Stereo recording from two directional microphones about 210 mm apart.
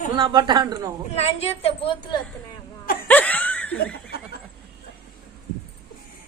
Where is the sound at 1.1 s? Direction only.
30° left (ahead or behind).